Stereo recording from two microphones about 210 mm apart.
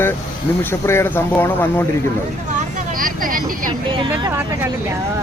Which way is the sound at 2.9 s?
40° right (ahead or behind).